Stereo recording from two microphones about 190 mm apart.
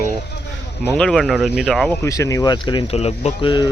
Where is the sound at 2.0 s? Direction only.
15° left (ahead or behind).